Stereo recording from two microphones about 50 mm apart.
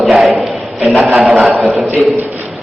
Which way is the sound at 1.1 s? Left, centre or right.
Centre.